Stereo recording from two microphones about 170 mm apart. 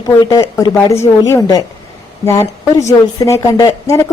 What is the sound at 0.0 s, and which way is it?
A woman's voice, 20° left (ahead or behind).